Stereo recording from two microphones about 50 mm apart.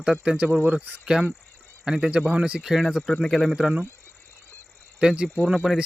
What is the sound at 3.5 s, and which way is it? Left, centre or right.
Speech, centre.